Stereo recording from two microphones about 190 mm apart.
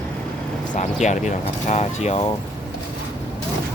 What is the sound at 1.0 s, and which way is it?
Speech, 40° left (ahead or behind).